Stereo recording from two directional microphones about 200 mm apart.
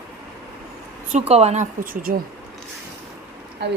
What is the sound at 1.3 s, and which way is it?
Speech, 30° right (ahead or behind).